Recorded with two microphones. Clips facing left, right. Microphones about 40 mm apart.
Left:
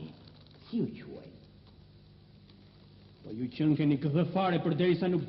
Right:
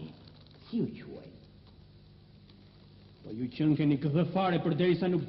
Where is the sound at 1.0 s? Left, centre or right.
Right.